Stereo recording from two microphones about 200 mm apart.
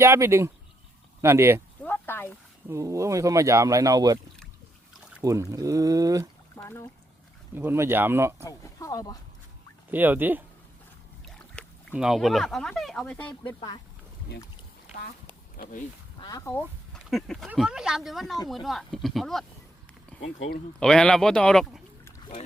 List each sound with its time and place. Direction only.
0.0 s speech: 10° right (ahead or behind)
1.8 s a sound: 10° left (ahead or behind)
2.6 s speech: 15° right (ahead or behind)
5.2 s speech: 15° right (ahead or behind)
6.6 s speech: 15° left (ahead or behind)
7.5 s speech: 10° right (ahead or behind)
8.4 s speech: 15° left (ahead or behind)
9.9 s speech: 10° right (ahead or behind)
11.3 s speech: 5° left (ahead or behind)
13.4 s speech: 20° left (ahead or behind)
15.5 s speech: 45° left (ahead or behind)
16.2 s speech: 15° left (ahead or behind)
20.1 s a sound: 5° left (ahead or behind)
20.7 s speech: 5° left (ahead or behind)